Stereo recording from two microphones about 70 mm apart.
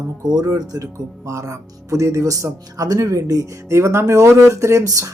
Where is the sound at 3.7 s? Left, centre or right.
Right.